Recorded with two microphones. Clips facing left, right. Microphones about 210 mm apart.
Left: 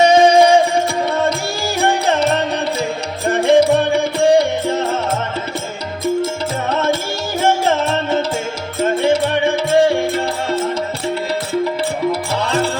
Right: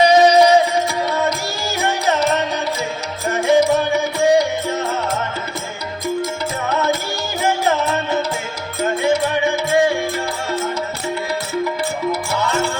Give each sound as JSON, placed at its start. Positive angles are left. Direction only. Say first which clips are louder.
{"t": 0.0, "sound": "music", "louder": "left 1 dB", "side_deg": 25}
{"t": 6.7, "sound": "music", "louder": "left 1 dB", "side_deg": 25}
{"t": 12.3, "sound": "music", "louder": "left 2 dB", "side_deg": 30}